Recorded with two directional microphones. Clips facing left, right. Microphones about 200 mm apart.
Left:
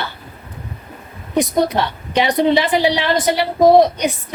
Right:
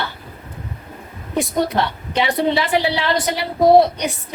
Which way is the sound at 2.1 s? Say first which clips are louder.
Left 4 dB; 20° left (ahead or behind).